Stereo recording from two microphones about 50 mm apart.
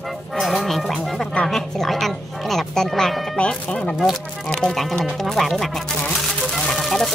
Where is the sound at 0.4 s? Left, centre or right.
Centre.